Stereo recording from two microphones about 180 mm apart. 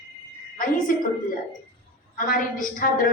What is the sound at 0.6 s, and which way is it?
Speech, 50° left (ahead or behind).